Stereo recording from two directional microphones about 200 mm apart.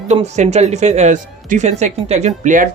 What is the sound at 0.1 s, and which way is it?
Speech, 35° right (ahead or behind).